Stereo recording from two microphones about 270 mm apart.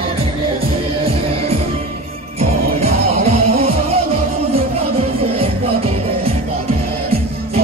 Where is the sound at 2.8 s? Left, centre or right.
Right.